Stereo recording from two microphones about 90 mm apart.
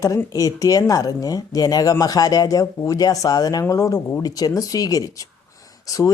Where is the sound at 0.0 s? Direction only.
40° left (ahead or behind).